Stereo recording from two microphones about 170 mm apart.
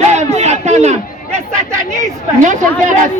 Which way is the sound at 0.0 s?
40° right (ahead or behind).